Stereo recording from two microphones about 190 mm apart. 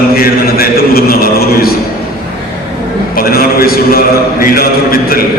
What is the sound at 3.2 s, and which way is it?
A man's voice, 50° left (ahead or behind).